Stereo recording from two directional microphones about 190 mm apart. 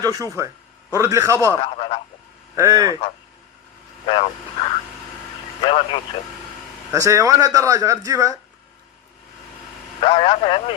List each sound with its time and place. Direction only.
0.0 s a man's voice: 20° right (ahead or behind)
1.6 s speech: 30° left (ahead or behind)
2.6 s a man's voice: 15° right (ahead or behind)
4.0 s speech: 30° left (ahead or behind)
5.6 s speech: 25° left (ahead or behind)
6.9 s a man's voice: 15° right (ahead or behind)
10.0 s speech: 25° left (ahead or behind)